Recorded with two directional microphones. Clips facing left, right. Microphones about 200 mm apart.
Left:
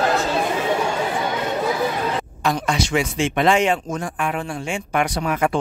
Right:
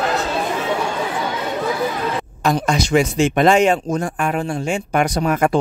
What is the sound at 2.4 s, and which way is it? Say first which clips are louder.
Speech: right 4 dB; 40° right (ahead or behind).